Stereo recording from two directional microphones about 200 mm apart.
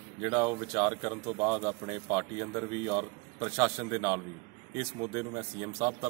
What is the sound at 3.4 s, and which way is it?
Speech, 10° right (ahead or behind).